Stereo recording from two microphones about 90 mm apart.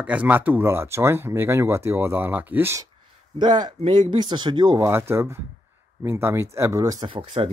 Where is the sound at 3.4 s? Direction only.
55° right (ahead or behind).